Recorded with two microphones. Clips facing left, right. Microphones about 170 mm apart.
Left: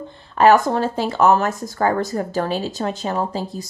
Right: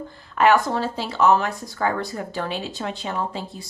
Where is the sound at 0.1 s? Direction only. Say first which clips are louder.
Left 4 dB; 30° left (ahead or behind).